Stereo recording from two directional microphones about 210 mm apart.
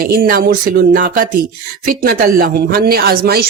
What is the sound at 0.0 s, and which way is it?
Speech, 45° right (ahead or behind).